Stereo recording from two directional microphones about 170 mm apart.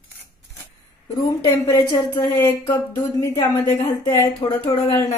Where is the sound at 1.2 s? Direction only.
20° left (ahead or behind).